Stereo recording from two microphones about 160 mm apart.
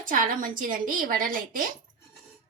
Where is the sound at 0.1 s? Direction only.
60° right (ahead or behind).